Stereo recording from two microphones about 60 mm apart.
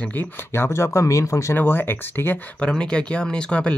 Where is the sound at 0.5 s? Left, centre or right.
Left.